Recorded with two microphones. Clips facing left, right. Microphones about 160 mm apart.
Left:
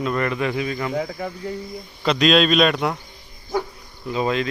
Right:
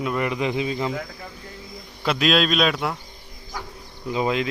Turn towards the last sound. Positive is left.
turn(degrees=-15)  # may be behind; listen again after turning